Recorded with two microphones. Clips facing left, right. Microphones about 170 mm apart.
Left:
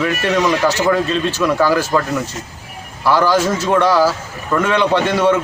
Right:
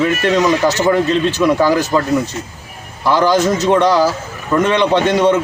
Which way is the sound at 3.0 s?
15° right (ahead or behind).